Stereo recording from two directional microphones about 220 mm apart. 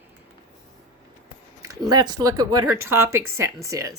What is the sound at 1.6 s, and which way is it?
Speech, 15° right (ahead or behind).